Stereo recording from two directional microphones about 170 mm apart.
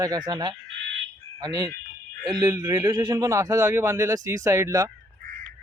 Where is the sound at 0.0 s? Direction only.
20° right (ahead or behind).